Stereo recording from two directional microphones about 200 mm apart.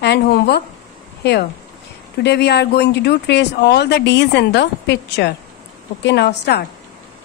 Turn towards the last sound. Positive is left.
turn(degrees=55)  # may be behind; listen again after turning